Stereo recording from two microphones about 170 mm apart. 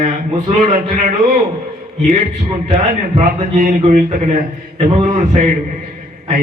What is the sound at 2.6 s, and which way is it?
A man's voice, 40° right (ahead or behind).